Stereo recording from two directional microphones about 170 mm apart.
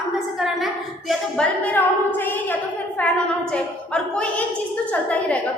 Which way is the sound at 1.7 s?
10° left (ahead or behind).